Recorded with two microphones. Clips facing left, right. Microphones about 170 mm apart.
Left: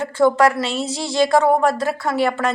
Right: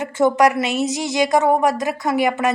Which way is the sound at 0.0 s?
20° right (ahead or behind).